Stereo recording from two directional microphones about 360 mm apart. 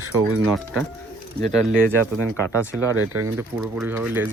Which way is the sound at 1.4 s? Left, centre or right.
Centre.